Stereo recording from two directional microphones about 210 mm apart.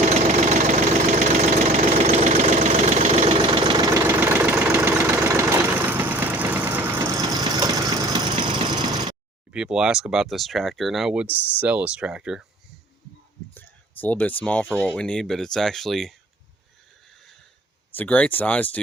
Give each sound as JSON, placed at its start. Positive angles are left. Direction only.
{"t": 0.1, "sound": "engine knocking", "side_deg": -35}
{"t": 1.4, "sound": "engine", "side_deg": -30}
{"t": 9.5, "sound": "speech", "side_deg": -5}
{"t": 11.3, "sound": "speech", "side_deg": 10}
{"t": 11.6, "sound": "speech", "side_deg": -5}
{"t": 13.5, "sound": "speech", "side_deg": 10}
{"t": 17.9, "sound": "speech", "side_deg": 5}